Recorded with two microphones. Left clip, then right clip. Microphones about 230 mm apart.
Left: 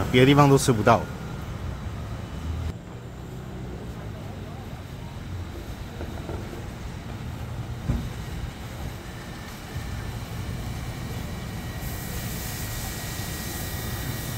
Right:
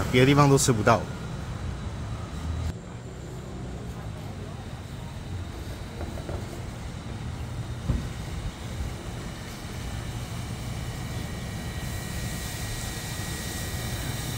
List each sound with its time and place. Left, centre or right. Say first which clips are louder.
0.1 s speech: left 3 dB; centre